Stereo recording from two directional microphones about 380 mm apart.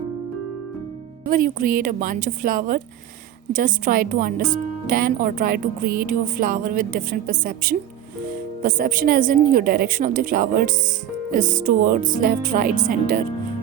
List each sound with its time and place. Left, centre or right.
1.3 s speech: right